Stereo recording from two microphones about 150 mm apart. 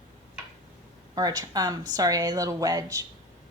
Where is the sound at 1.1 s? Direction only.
25° right (ahead or behind).